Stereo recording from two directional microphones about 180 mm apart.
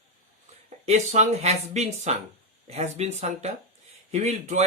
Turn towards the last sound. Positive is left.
turn(degrees=-40)  # may be behind; listen again after turning